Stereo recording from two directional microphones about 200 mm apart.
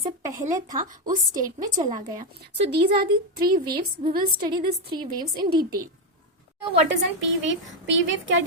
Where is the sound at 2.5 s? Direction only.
55° right (ahead or behind).